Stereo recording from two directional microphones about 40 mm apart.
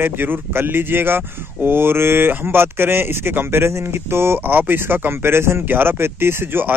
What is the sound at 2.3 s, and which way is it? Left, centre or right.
Speech, right.